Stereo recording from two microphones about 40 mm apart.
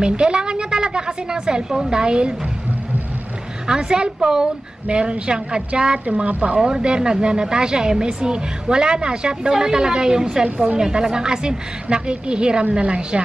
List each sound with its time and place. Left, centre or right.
0.0 s a woman's voice: right
3.6 s a woman's voice: centre
6.0 s speech: right
6.7 s a woman's voice: right
10.4 s speech: right
10.8 s a woman's voice: centre